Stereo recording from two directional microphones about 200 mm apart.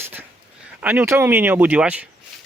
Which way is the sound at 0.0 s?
10° right (ahead or behind).